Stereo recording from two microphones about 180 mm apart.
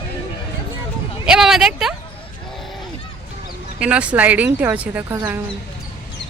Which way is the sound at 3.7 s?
5° right (ahead or behind).